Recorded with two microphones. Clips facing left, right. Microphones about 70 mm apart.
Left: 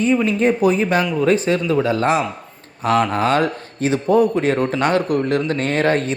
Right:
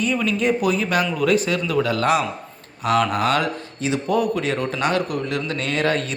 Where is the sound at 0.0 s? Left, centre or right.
Left.